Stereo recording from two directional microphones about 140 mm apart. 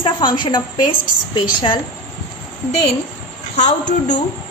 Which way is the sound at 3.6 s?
60° left (ahead or behind).